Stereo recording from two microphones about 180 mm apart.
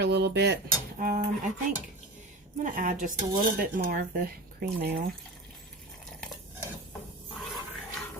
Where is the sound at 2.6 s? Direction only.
45° right (ahead or behind).